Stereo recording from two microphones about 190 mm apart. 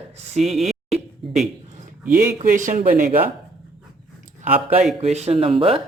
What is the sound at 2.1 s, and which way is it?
Speech, 40° right (ahead or behind).